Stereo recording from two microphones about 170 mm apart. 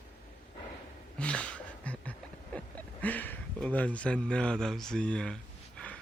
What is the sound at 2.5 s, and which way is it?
Speech, 10° left (ahead or behind).